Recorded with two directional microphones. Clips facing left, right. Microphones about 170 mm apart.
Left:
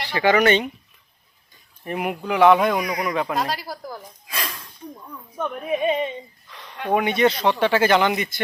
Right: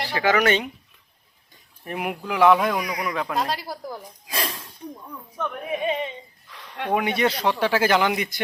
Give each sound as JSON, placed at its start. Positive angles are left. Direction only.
{"t": 0.1, "sound": "speech", "side_deg": 0}
{"t": 1.8, "sound": "speech", "side_deg": 0}
{"t": 3.5, "sound": "speech", "side_deg": -25}
{"t": 4.3, "sound": "a sound", "side_deg": -30}
{"t": 4.9, "sound": "speech", "side_deg": -5}
{"t": 5.4, "sound": "speech", "side_deg": 15}
{"t": 6.5, "sound": "a sound", "side_deg": -5}
{"t": 6.9, "sound": "speech", "side_deg": -5}